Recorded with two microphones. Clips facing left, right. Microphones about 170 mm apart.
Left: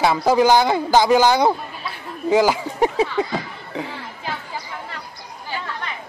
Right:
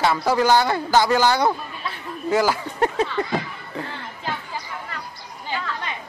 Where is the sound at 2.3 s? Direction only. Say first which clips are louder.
Left 4 dB; 15° left (ahead or behind).